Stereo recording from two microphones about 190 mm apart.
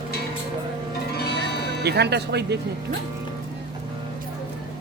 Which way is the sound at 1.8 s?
60° right (ahead or behind).